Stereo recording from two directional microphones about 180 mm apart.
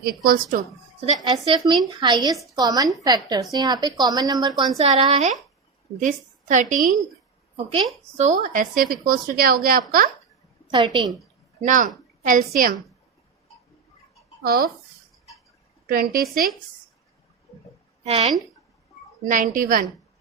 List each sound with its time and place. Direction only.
0.0 s speech: 60° right (ahead or behind)
1.2 s a woman's voice: 25° right (ahead or behind)
4.8 s a woman's voice: 35° right (ahead or behind)
7.5 s a woman's voice: 30° right (ahead or behind)
8.1 s speech: 40° right (ahead or behind)
10.7 s a woman's voice: 25° right (ahead or behind)
11.6 s speech: 45° right (ahead or behind)
14.4 s speech: 55° right (ahead or behind)
15.9 s speech: 55° right (ahead or behind)
18.0 s a woman's voice: 35° right (ahead or behind)
19.3 s speech: 45° right (ahead or behind)